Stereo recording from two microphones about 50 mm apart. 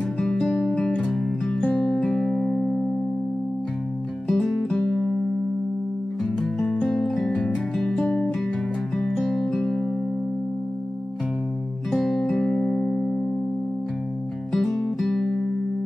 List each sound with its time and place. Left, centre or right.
0.2 s music: centre
1.6 s music: left
2.0 s music: centre
4.3 s music: centre
6.6 s music: centre
11.9 s music: centre
14.5 s music: centre